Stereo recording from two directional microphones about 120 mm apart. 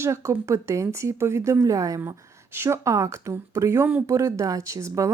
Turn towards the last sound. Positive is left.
turn(degrees=-25)  # may be behind; listen again after turning